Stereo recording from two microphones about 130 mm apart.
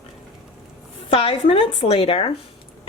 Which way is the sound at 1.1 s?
45° left (ahead or behind).